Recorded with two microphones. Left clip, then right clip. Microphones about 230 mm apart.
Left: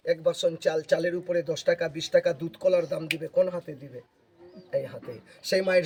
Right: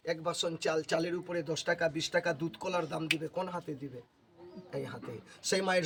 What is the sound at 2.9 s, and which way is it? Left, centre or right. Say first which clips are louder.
Speech: left 7 dB; centre.